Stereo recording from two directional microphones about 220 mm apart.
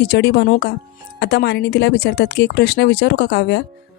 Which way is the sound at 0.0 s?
50° left (ahead or behind).